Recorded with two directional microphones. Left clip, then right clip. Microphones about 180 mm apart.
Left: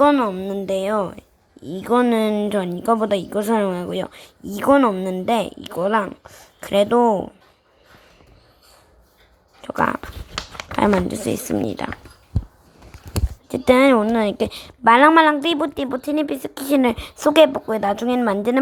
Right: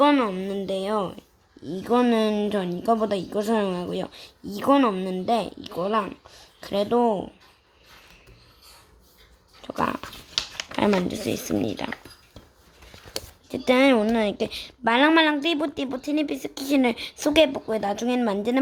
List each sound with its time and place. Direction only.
0.0 s a woman's voice: 20° left (ahead or behind)
9.6 s a woman's voice: 15° left (ahead or behind)
13.1 s a sound: 15° left (ahead or behind)
14.0 s a woman's voice: 10° left (ahead or behind)